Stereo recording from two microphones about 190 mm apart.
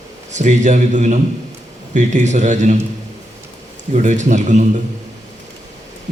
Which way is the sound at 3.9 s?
40° right (ahead or behind).